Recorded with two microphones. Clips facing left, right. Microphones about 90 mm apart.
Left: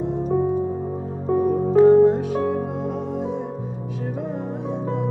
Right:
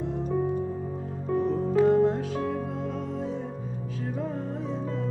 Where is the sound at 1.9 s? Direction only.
20° left (ahead or behind).